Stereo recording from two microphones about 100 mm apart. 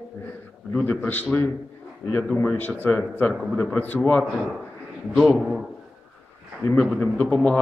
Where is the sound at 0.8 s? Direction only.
20° left (ahead or behind).